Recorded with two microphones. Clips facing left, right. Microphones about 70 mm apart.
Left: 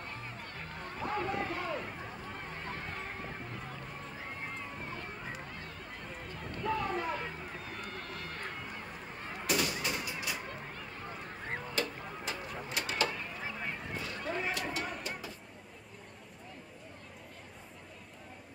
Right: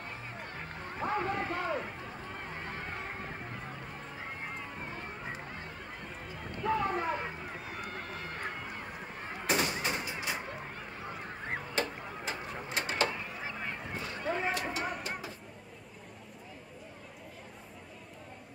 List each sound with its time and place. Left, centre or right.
0.1 s music: centre
1.4 s a sound: centre
1.9 s run: centre
2.5 s a sound: right
4.4 s run: centre
6.2 s run: centre
9.5 s gunshot: right
12.3 s printer: right
12.7 s a sound: right
13.2 s chop: centre
13.9 s a sound: right
14.5 s vehicle: right